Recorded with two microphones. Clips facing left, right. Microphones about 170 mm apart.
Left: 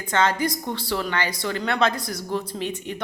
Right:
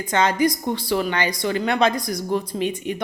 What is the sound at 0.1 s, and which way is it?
Speech, 15° right (ahead or behind).